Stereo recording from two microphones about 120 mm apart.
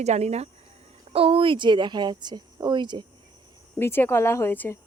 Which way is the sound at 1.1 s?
50° right (ahead or behind).